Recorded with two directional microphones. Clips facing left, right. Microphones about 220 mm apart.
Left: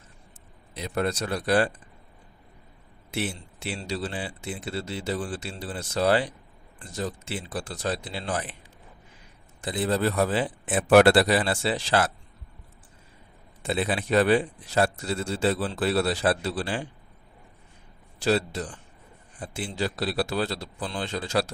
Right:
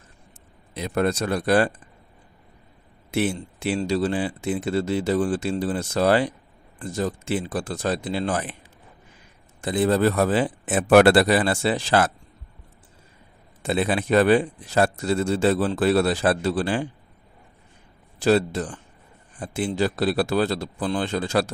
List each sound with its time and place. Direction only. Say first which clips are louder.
0.7 s speech: right 5 dB; 50° right (ahead or behind)
3.1 s speech: right 7 dB; 50° right (ahead or behind)
9.7 s speech: right 6 dB; 50° right (ahead or behind)
13.7 s speech: right 4 dB; 50° right (ahead or behind)
18.2 s speech: right 5 dB; 50° right (ahead or behind)